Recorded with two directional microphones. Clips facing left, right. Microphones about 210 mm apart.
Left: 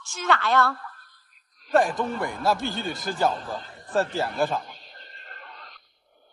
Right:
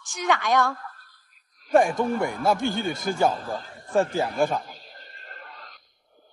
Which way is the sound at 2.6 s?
50° right (ahead or behind).